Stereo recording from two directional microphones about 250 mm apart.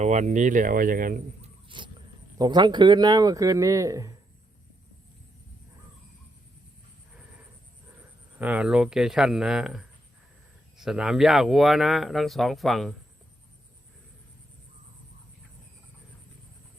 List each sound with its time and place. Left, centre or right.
0.0 s speech: right
1.6 s a sound: centre
2.4 s speech: centre
8.4 s speech: centre